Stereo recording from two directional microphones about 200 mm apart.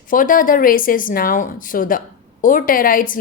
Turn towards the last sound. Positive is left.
turn(degrees=45)  # may be behind; listen again after turning